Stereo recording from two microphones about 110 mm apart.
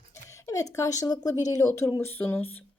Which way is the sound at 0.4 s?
30° left (ahead or behind).